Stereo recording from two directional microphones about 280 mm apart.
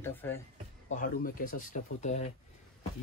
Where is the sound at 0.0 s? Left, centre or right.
Centre.